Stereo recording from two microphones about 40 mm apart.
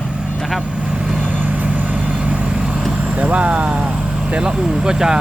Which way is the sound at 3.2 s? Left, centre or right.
Right.